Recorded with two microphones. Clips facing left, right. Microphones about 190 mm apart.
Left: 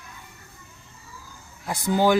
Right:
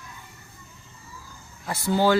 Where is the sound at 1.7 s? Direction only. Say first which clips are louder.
Left 1 dB; 15° left (ahead or behind).